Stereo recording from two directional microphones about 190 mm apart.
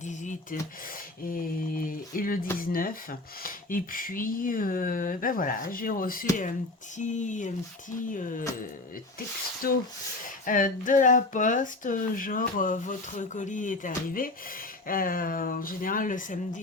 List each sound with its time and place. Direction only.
0.0 s a sound: 40° left (ahead or behind)
1.3 s speech: 50° left (ahead or behind)
9.6 s speech: 50° left (ahead or behind)